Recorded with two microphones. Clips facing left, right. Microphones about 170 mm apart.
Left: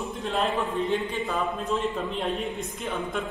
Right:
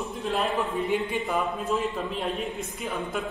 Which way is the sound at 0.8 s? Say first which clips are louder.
Even; 15° right (ahead or behind).